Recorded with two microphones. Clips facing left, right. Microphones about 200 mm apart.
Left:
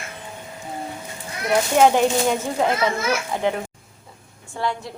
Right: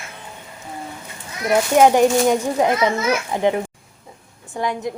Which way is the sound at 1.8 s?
15° right (ahead or behind).